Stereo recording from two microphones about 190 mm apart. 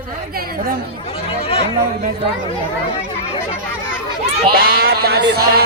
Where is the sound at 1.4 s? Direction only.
30° left (ahead or behind).